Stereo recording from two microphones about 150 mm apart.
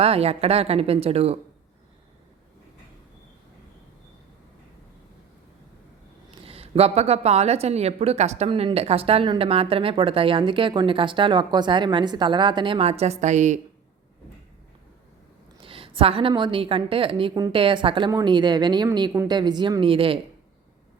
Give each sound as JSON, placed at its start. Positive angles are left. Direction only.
{"t": 0.0, "sound": "speech", "side_deg": -40}
{"t": 6.3, "sound": "a woman's voice", "side_deg": -40}
{"t": 15.6, "sound": "speech", "side_deg": -35}